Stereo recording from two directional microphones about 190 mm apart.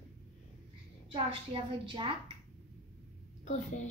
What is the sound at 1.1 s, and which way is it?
Speech, 25° right (ahead or behind).